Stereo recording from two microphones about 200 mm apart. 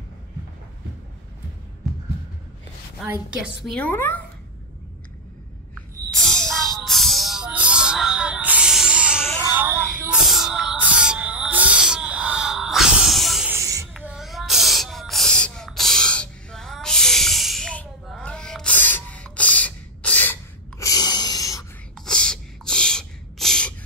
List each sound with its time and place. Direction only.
3.6 s a woman's voice: 5° left (ahead or behind)
6.1 s music: centre (ahead or behind)
13.6 s a sound: 15° right (ahead or behind)
14.0 s a sound: centre (ahead or behind)
20.8 s snort: 20° left (ahead or behind)
21.9 s gasp: 5° left (ahead or behind)